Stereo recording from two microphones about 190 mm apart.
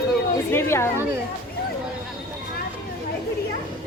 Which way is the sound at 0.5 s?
15° left (ahead or behind).